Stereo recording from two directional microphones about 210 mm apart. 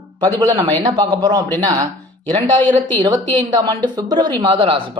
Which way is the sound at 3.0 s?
20° right (ahead or behind).